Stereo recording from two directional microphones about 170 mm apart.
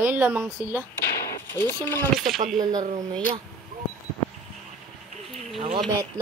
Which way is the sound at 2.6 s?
25° right (ahead or behind).